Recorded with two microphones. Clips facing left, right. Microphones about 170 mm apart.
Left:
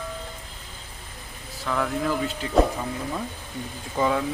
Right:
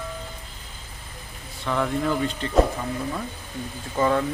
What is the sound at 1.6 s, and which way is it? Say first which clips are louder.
Speech: right 1 dB; centre (ahead or behind).